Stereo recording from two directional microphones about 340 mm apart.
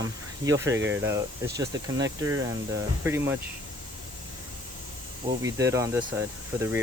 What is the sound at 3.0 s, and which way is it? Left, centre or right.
Speech, centre.